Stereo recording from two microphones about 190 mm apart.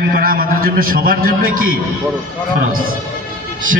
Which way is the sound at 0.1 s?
50° right (ahead or behind).